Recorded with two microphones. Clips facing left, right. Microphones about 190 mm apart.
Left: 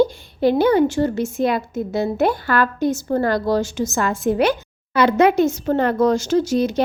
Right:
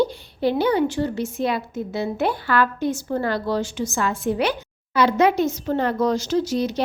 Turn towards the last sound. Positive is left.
turn(degrees=50)  # may be behind; listen again after turning